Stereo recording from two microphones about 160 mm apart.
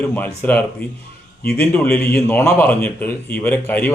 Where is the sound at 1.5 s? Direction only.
5° left (ahead or behind).